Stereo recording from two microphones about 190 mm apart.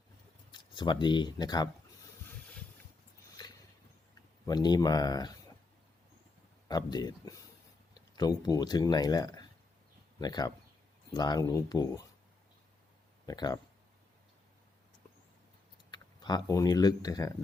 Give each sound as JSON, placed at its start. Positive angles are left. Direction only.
{"t": 0.5, "sound": "speech", "side_deg": 25}
{"t": 4.4, "sound": "speech", "side_deg": 20}
{"t": 6.7, "sound": "speech", "side_deg": 20}
{"t": 13.2, "sound": "speech", "side_deg": 20}
{"t": 15.9, "sound": "speech", "side_deg": 20}